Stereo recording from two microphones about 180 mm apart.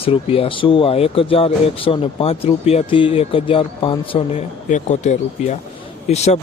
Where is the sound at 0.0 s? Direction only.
30° left (ahead or behind).